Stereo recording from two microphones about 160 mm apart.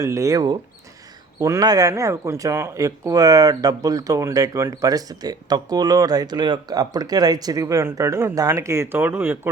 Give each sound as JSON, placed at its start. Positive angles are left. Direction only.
{"t": 0.0, "sound": "speech", "side_deg": -20}